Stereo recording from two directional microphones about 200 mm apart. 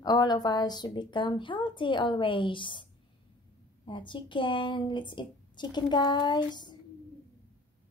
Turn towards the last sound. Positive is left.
turn(degrees=20)  # may be behind; listen again after turning